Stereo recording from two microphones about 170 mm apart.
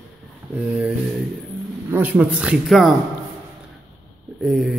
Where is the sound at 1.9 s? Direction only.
10° right (ahead or behind).